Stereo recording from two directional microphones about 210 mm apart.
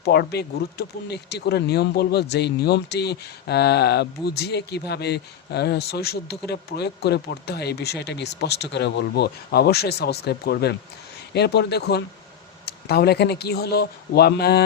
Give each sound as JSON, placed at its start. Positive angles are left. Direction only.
{"t": 0.0, "sound": "speech", "side_deg": 50}